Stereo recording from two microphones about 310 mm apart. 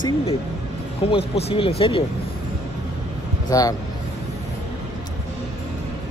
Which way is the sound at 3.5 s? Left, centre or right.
Centre.